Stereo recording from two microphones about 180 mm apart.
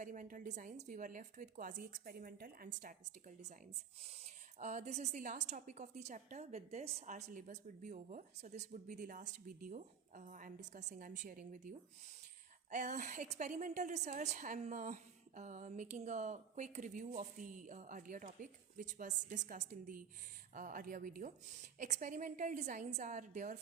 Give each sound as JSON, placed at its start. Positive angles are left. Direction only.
{"t": 0.0, "sound": "a woman's voice", "side_deg": -45}
{"t": 4.6, "sound": "a woman's voice", "side_deg": -40}
{"t": 12.7, "sound": "a woman's voice", "side_deg": -40}